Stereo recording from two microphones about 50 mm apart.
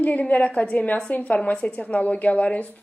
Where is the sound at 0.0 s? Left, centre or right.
Left.